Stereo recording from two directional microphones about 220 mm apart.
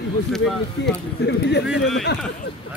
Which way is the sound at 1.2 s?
50° left (ahead or behind).